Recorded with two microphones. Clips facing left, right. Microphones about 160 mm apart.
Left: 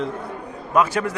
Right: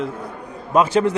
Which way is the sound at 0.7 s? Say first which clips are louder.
Right 4 dB; 25° right (ahead or behind).